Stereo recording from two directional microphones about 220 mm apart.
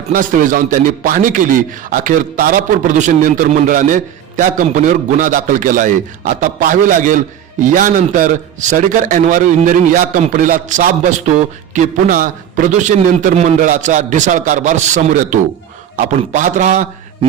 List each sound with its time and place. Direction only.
0.1 s a man's voice: 35° right (ahead or behind)